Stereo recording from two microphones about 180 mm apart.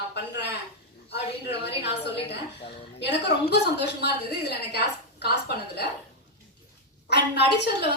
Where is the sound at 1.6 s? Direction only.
70° left (ahead or behind).